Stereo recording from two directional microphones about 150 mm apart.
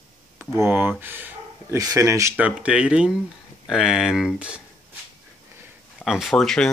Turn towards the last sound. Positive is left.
turn(degrees=5)  # may be behind; listen again after turning